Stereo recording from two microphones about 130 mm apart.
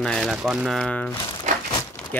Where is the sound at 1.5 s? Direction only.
70° right (ahead or behind).